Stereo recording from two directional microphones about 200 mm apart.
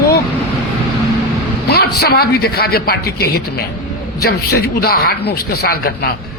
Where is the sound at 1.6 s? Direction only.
55° left (ahead or behind).